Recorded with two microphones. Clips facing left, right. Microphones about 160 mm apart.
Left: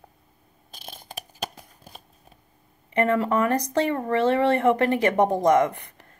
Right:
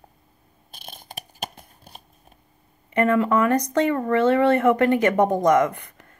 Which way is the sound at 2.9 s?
30° left (ahead or behind).